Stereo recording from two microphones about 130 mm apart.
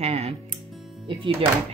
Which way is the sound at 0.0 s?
50° right (ahead or behind).